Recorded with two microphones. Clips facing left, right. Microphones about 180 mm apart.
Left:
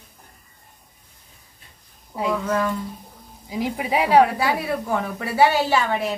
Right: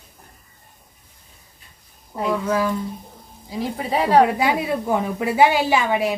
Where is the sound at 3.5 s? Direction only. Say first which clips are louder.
Even; 10° left (ahead or behind).